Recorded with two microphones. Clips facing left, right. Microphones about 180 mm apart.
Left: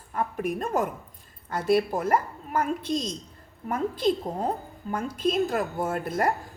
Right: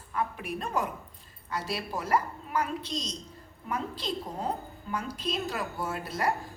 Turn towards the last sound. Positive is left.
turn(degrees=50)  # may be behind; listen again after turning